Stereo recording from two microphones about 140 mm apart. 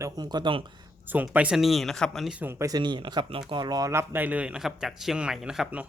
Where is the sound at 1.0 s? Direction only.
10° right (ahead or behind).